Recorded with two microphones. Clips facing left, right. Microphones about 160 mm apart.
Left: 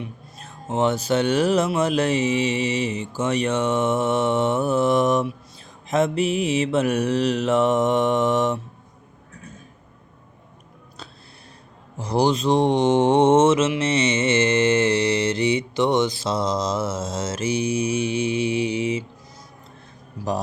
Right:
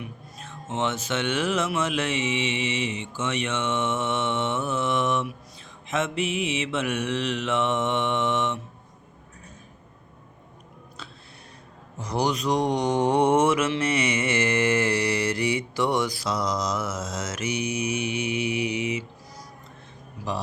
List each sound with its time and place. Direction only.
0.0 s speech: 35° left (ahead or behind)
11.9 s mantra: 30° left (ahead or behind)
20.2 s a sound: 35° left (ahead or behind)